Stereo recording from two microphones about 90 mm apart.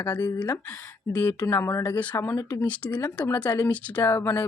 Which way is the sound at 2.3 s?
35° left (ahead or behind).